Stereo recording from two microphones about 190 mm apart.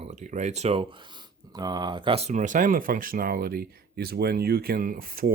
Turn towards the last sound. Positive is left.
turn(degrees=-50)  # may be behind; listen again after turning